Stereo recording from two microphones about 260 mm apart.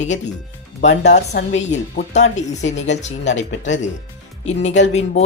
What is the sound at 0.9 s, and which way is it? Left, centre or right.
Speech, left.